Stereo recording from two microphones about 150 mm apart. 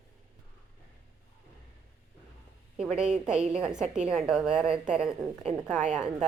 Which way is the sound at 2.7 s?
5° right (ahead or behind).